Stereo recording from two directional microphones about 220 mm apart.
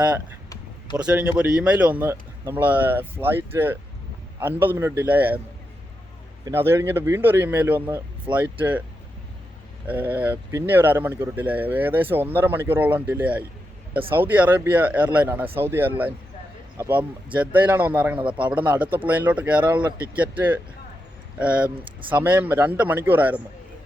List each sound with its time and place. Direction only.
0.9 s speech: 5° right (ahead or behind)
6.4 s speech: 10° right (ahead or behind)
9.8 s speech: 10° right (ahead or behind)